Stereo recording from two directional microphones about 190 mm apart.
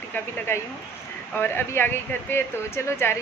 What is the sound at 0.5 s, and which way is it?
Speech, 15° left (ahead or behind).